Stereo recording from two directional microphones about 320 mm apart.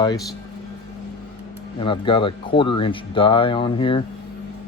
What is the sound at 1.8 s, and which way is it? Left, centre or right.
Speech, centre.